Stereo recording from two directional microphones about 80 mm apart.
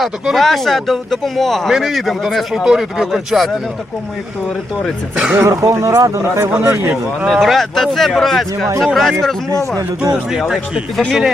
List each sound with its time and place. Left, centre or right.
0.0 s speech: centre
5.1 s speech: centre
5.4 s speech: right
7.3 s speech: centre
9.7 s speech: right
10.5 s speech: centre